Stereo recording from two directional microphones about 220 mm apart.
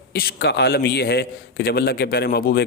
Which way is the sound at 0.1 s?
45° left (ahead or behind).